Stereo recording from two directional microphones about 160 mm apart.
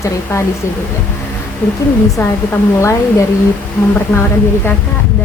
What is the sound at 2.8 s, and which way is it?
Speech, 20° left (ahead or behind).